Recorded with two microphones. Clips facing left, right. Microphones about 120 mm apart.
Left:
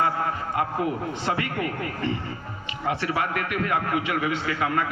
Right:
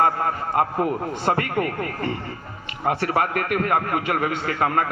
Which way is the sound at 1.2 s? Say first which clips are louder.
Right 6 dB; 45° right (ahead or behind).